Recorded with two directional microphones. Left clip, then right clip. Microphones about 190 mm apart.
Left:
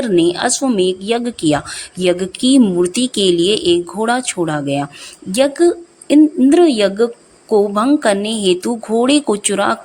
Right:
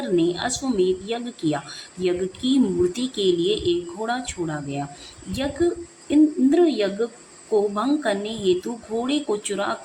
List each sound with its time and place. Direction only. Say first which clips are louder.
0.0 s a woman's voice: left 8 dB; 50° left (ahead or behind)